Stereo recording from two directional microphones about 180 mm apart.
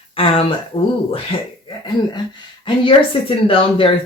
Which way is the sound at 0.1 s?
30° left (ahead or behind).